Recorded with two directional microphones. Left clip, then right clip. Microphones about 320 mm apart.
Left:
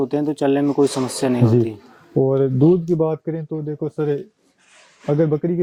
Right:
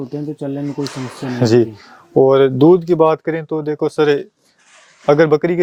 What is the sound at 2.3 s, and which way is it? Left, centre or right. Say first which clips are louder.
Speech: right 6 dB; centre.